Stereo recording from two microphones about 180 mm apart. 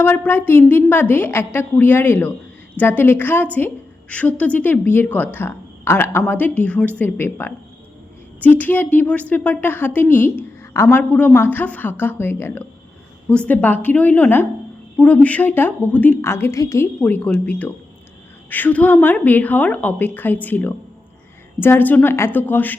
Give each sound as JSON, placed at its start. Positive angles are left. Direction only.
{"t": 0.0, "sound": "speech", "side_deg": 10}